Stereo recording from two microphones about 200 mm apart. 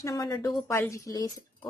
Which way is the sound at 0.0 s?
20° left (ahead or behind).